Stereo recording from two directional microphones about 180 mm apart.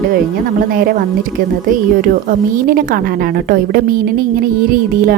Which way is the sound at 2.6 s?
50° right (ahead or behind).